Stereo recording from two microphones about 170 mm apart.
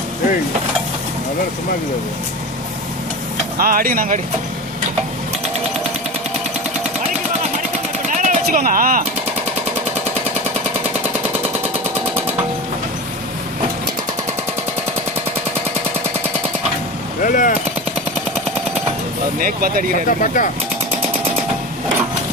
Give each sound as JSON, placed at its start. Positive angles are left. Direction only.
{"t": 3.6, "sound": "speech", "side_deg": -60}
{"t": 8.1, "sound": "a sound", "side_deg": -45}
{"t": 17.2, "sound": "speech", "side_deg": 50}
{"t": 19.4, "sound": "speech", "side_deg": -60}
{"t": 20.1, "sound": "speech", "side_deg": 50}